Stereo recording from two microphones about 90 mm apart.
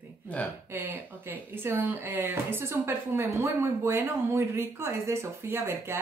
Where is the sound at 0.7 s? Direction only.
25° right (ahead or behind).